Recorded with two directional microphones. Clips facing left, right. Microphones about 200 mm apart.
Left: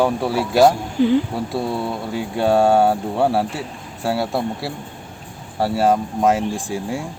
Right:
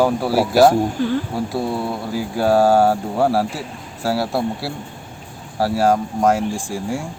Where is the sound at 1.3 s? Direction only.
Centre (ahead or behind).